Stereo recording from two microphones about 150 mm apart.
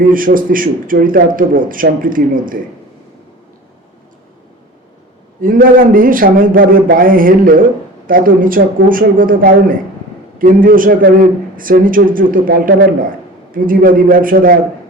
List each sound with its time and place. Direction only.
0.0 s speech: 65° right (ahead or behind)
5.4 s speech: 70° right (ahead or behind)